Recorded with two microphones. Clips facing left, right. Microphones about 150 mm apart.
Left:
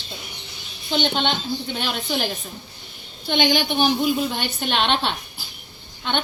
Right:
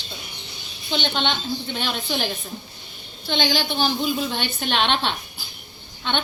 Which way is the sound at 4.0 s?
5° left (ahead or behind).